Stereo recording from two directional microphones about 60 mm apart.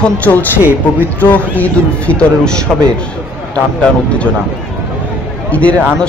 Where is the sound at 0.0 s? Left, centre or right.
Left.